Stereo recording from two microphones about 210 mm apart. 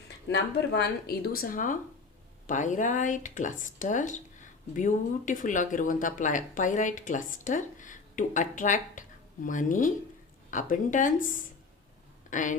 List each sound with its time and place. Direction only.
0.3 s speech: 50° left (ahead or behind); by 12.5 s 35° left (ahead or behind)